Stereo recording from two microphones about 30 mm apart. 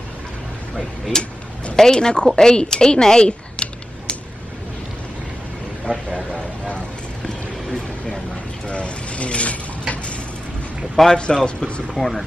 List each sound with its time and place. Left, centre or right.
1.1 s a woman's voice: centre
3.6 s a sound: left
5.9 s speech: right
8.6 s a sound: left
11.1 s speech: left
12.0 s speech: centre